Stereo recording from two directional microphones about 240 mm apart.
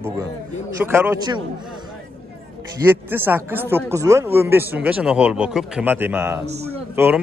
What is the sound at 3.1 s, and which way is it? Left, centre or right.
Speech, centre.